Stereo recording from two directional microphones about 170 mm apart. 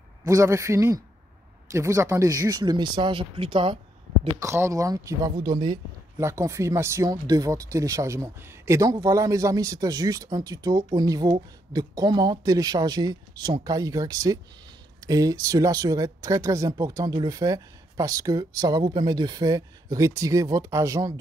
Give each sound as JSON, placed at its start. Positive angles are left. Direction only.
{"t": 0.2, "sound": "speech", "side_deg": -15}
{"t": 4.4, "sound": "speech", "side_deg": -15}